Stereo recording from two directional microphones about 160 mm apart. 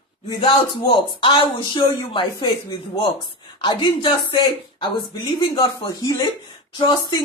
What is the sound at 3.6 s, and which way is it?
Speech, 30° left (ahead or behind).